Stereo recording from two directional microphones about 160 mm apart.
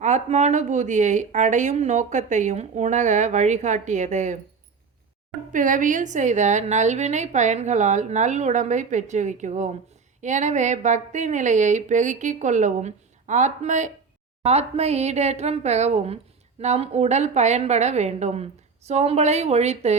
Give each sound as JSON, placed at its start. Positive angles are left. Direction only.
{"t": 0.0, "sound": "speech", "side_deg": -45}
{"t": 5.5, "sound": "speech", "side_deg": -55}